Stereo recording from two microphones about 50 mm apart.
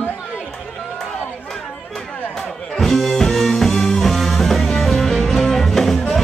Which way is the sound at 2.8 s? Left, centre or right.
Centre.